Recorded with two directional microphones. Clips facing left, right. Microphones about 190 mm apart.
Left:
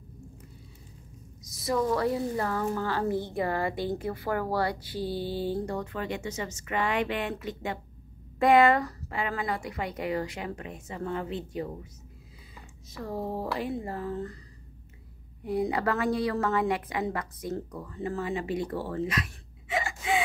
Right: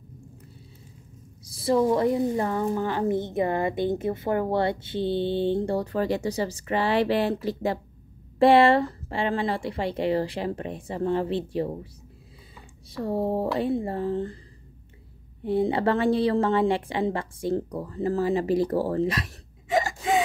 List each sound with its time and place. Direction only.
1.4 s a woman's voice: 30° right (ahead or behind)
15.4 s a woman's voice: 30° right (ahead or behind)